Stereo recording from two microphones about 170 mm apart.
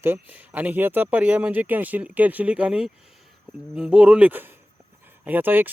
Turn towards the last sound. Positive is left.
turn(degrees=-10)  # may be behind; listen again after turning